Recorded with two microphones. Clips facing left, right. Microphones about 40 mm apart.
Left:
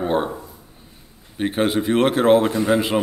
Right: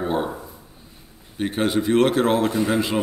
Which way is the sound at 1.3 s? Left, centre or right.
Centre.